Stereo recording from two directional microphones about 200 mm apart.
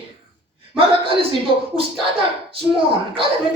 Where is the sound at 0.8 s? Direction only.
25° right (ahead or behind).